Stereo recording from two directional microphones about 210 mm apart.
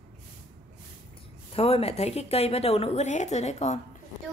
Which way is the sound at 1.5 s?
30° left (ahead or behind).